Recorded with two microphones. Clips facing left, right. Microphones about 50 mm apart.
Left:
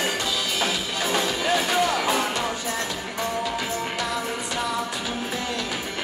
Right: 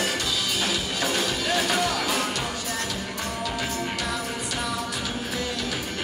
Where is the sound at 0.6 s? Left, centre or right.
Left.